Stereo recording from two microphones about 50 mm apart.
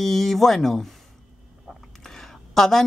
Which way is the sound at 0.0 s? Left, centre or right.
Centre.